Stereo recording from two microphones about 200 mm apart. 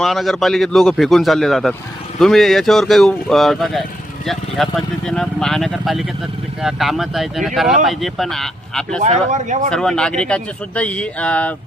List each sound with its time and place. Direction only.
0.0 s a man's voice: centre (ahead or behind)
9.0 s speech: 35° right (ahead or behind)
9.6 s a man's voice: 5° left (ahead or behind)